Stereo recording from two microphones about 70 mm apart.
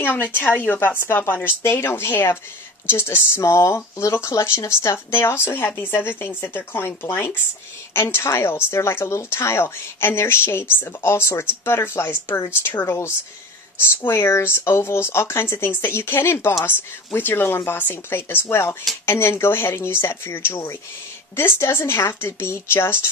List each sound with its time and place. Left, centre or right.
0.0 s speech: left